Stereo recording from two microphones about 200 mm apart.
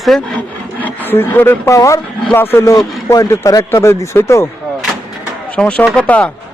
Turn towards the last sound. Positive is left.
turn(degrees=5)  # may be behind; listen again after turning